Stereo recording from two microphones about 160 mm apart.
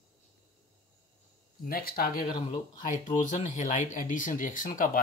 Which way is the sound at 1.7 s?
65° left (ahead or behind).